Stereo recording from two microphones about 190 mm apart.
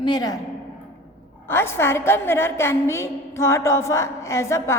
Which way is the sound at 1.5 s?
15° left (ahead or behind).